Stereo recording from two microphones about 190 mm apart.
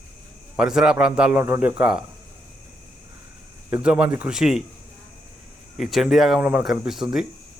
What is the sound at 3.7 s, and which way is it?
Speech, 10° right (ahead or behind).